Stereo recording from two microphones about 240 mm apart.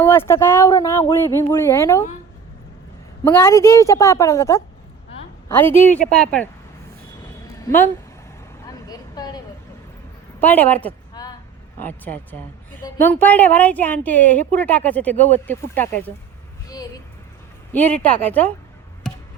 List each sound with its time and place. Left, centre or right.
0.0 s a woman's voice: centre
3.2 s a woman's voice: centre
7.6 s speech: centre
8.6 s vehicle: centre
10.4 s a woman's voice: centre
16.6 s a sound: centre
17.7 s a woman's voice: centre